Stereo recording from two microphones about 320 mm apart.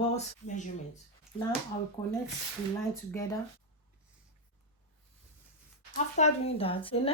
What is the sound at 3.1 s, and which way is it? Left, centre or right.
Speech, centre.